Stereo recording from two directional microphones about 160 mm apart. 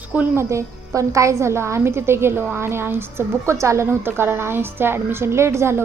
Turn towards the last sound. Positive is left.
turn(degrees=-15)  # may be behind; listen again after turning